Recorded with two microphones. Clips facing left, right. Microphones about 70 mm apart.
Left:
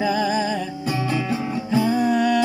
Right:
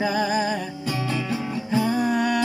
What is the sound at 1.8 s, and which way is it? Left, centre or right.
Music, right.